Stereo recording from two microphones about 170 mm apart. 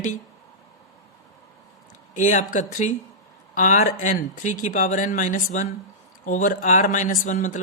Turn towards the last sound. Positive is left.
turn(degrees=45)  # may be behind; listen again after turning